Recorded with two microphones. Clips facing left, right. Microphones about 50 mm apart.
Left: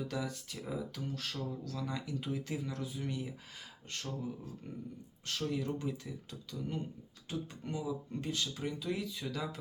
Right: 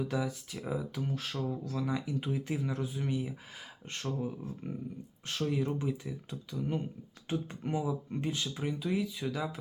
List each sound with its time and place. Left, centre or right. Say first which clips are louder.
0.0 s speech: right 5 dB; centre
3.9 s speech: right 5 dB; right; by 9.6 s centre